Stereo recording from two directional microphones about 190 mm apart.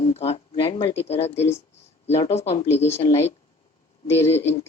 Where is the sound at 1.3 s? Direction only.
15° left (ahead or behind).